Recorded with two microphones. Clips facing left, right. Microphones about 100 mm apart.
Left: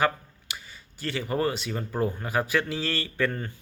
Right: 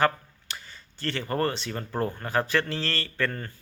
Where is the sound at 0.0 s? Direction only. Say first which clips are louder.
Right 1 dB; 5° left (ahead or behind).